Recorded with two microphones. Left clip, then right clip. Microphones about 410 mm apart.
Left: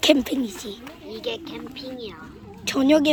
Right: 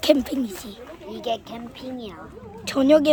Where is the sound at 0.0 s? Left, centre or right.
Centre.